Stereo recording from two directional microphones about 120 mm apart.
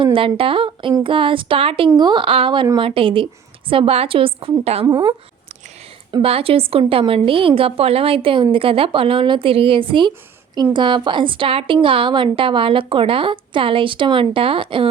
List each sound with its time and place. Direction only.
0.0 s a woman's voice: 45° right (ahead or behind)
4.9 s a woman's voice: 35° right (ahead or behind)
6.2 s a woman's voice: 50° right (ahead or behind)